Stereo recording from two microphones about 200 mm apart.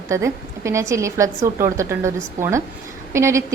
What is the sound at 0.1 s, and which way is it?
A woman's voice, 15° right (ahead or behind).